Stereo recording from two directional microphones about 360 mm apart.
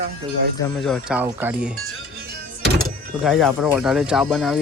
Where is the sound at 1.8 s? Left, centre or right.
Right.